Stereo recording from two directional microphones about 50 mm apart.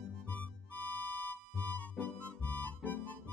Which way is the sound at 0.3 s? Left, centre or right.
Left.